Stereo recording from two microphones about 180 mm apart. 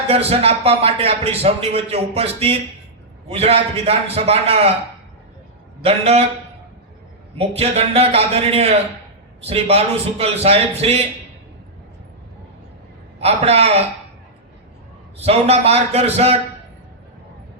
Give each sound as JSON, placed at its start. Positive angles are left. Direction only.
{"t": 0.1, "sound": "a man's voice", "side_deg": -35}
{"t": 5.8, "sound": "a man's voice", "side_deg": -35}
{"t": 7.3, "sound": "a man's voice", "side_deg": -35}
{"t": 13.1, "sound": "a man's voice", "side_deg": -35}
{"t": 15.2, "sound": "a man's voice", "side_deg": -35}